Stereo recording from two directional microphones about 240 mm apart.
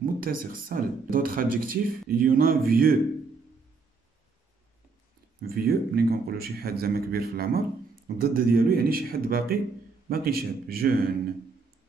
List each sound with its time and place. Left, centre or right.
0.0 s speech: right
5.4 s speech: right